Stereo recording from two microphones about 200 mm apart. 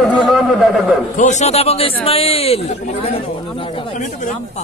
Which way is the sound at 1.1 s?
35° left (ahead or behind).